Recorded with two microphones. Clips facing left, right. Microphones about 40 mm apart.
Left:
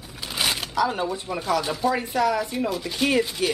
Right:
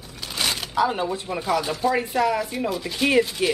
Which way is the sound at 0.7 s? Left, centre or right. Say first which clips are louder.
Right 4 dB; centre.